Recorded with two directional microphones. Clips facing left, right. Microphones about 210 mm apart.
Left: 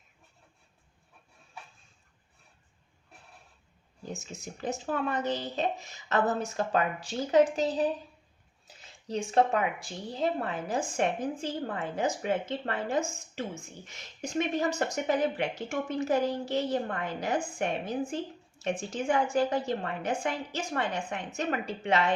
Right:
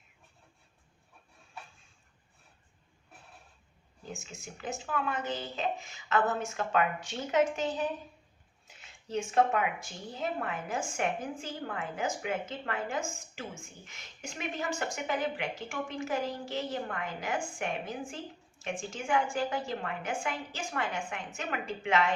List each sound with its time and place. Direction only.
4.1 s speech: 35° left (ahead or behind)